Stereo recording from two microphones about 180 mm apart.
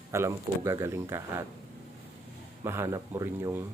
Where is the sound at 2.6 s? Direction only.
15° right (ahead or behind).